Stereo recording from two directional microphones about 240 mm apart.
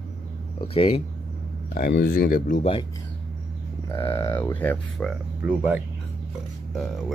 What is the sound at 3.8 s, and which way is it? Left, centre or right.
Speech, centre.